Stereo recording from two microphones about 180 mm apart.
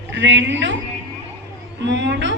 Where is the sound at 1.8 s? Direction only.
75° right (ahead or behind).